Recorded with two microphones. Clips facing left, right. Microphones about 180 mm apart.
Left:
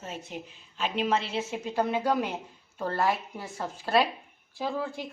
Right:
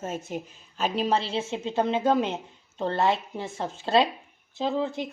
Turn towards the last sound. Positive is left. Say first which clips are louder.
# right 5 dB
turn(degrees=-20)  # may be behind; listen again after turning